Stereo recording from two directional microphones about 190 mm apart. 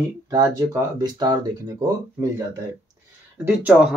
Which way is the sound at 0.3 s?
20° right (ahead or behind).